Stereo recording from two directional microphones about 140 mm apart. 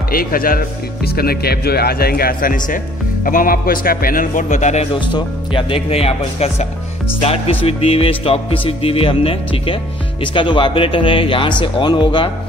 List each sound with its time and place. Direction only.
0.1 s speech: 90° left; by 2.8 s 70° left (ahead or behind)
3.3 s speech: 85° left; by 4.8 s 55° left (ahead or behind)
5.0 s speech: 35° left (ahead or behind)
7.2 s music: 45° left (ahead or behind)